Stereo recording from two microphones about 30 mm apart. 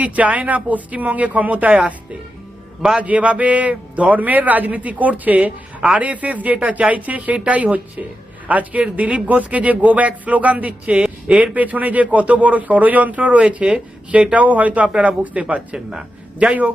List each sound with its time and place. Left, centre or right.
0.0 s a man's voice: right
3.0 s a man's voice: right
11.5 s a man's voice: right
13.6 s speech: right
14.3 s a man's voice: right